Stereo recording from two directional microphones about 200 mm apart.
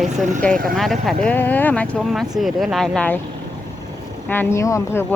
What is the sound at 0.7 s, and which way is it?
Speech, centre (ahead or behind).